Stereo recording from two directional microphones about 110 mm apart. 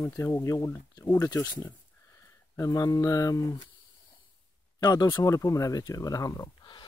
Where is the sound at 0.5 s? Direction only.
35° left (ahead or behind).